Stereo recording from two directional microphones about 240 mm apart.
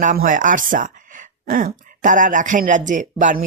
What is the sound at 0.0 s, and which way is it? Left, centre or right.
Speech, right.